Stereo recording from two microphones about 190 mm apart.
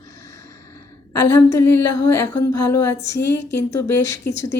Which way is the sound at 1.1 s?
15° left (ahead or behind).